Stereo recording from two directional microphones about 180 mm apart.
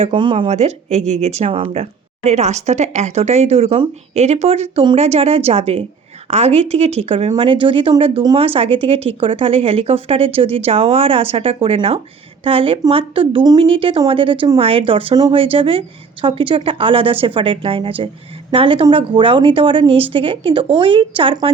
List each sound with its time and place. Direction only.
0.0 s speech: 30° right (ahead or behind)